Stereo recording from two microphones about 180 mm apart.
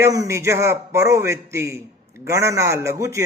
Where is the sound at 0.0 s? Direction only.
20° right (ahead or behind).